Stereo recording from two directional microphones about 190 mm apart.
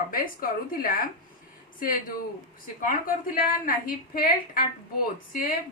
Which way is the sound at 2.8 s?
45° left (ahead or behind).